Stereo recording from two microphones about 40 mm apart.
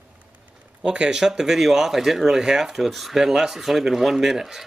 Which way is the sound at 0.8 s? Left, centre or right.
Right.